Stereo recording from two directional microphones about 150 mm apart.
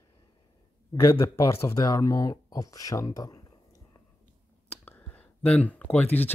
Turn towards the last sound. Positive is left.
turn(degrees=10)  # may be behind; listen again after turning